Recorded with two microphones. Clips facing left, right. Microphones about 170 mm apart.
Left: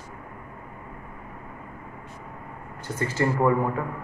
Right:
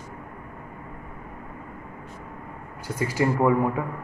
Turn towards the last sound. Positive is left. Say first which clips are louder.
# right 1 dB
turn(degrees=-10)  # may be behind; listen again after turning